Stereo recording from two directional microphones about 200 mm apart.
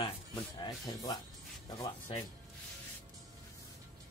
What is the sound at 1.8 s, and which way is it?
Speech, 20° left (ahead or behind).